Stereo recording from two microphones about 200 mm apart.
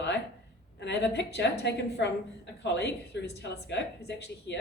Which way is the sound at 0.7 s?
60° left (ahead or behind).